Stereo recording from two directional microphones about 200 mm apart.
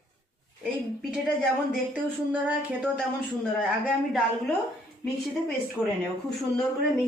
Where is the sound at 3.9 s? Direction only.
Centre (ahead or behind).